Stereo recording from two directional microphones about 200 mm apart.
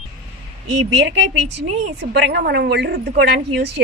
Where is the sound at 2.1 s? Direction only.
55° right (ahead or behind).